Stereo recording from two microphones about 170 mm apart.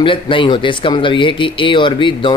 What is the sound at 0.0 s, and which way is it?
Speech, 30° left (ahead or behind).